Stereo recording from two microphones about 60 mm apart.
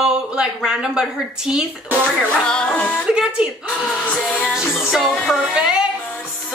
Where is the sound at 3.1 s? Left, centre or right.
Centre.